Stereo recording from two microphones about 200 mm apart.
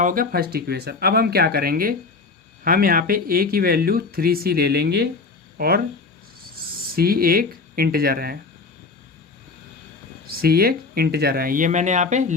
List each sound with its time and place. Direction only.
0.0 s speech: 45° right (ahead or behind)
10.2 s speech: 50° right (ahead or behind)